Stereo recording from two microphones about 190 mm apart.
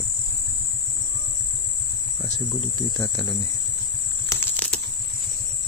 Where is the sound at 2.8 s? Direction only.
20° left (ahead or behind).